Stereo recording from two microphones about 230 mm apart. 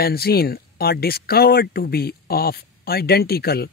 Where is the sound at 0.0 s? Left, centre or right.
Left.